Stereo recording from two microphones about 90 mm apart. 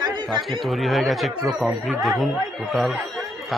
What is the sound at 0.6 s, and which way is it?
Speech, centre (ahead or behind).